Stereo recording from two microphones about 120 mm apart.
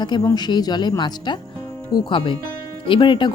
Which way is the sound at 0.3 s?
35° left (ahead or behind).